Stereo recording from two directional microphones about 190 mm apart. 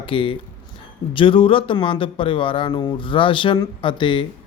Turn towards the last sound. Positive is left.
turn(degrees=25)  # may be behind; listen again after turning